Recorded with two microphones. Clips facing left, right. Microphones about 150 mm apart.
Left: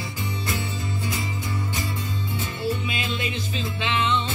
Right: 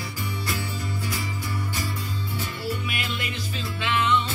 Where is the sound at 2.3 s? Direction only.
20° left (ahead or behind).